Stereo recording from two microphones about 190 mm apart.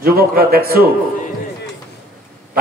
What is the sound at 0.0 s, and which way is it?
Speech, 55° right (ahead or behind).